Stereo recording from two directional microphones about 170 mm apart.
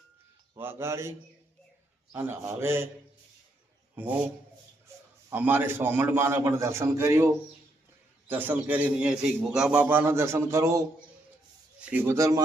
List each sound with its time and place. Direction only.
0.5 s a man's voice: 15° right (ahead or behind)
2.1 s a man's voice: 15° right (ahead or behind)
4.0 s a man's voice: 10° right (ahead or behind)
5.3 s a man's voice: 10° right (ahead or behind)
8.3 s a man's voice: 10° right (ahead or behind)